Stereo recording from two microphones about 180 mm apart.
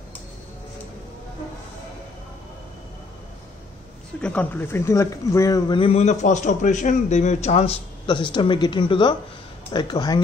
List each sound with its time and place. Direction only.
4.2 s speech: 5° left (ahead or behind); by 10.2 s 25° left (ahead or behind)